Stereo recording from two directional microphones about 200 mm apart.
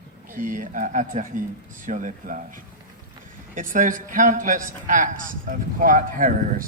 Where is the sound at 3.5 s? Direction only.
40° right (ahead or behind).